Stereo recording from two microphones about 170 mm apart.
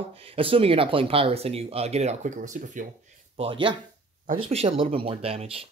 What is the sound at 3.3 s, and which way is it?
Speech, 30° right (ahead or behind).